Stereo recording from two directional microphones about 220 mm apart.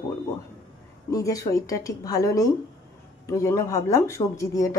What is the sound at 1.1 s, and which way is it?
A woman's voice, 15° left (ahead or behind).